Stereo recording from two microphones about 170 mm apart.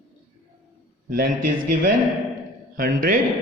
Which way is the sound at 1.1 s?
55° right (ahead or behind).